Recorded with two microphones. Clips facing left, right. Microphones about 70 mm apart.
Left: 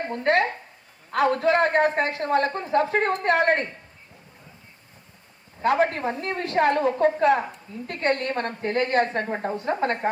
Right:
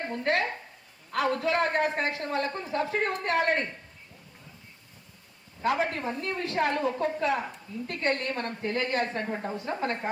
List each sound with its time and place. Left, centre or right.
0.1 s a woman's voice: left
5.6 s a woman's voice: left